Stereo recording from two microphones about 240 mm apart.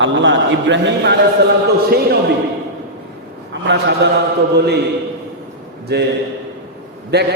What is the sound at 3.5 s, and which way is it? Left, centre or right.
Speech, right.